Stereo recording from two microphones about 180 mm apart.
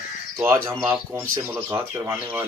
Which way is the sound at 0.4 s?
15° right (ahead or behind).